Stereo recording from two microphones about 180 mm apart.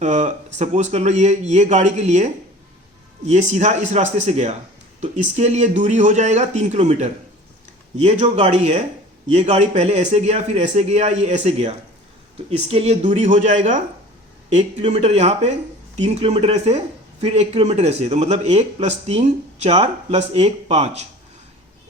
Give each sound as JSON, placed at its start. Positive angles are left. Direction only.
{"t": 0.0, "sound": "speech", "side_deg": -40}
{"t": 3.2, "sound": "speech", "side_deg": -40}